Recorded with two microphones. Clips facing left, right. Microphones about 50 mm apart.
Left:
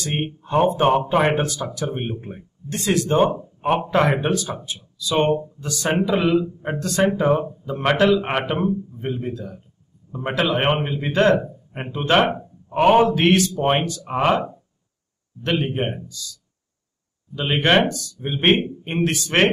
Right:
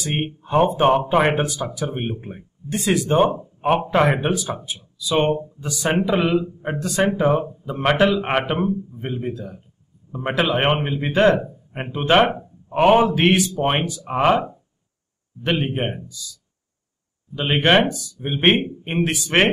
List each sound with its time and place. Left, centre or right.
0.0 s a man's voice: centre
15.4 s a man's voice: centre
17.4 s a man's voice: centre